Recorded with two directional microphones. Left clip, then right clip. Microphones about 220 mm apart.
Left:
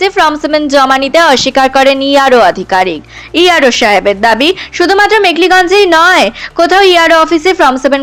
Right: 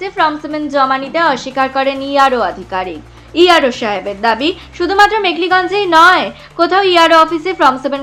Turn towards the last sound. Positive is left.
turn(degrees=35)  # may be behind; listen again after turning